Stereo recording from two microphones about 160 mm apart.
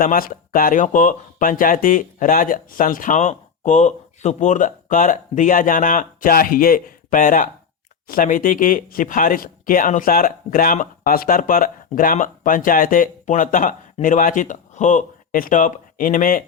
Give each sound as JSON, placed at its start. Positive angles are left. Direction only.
{"t": 0.0, "sound": "speech", "side_deg": 60}